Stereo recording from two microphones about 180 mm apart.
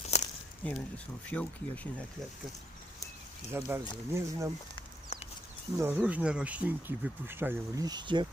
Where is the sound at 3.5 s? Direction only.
15° right (ahead or behind).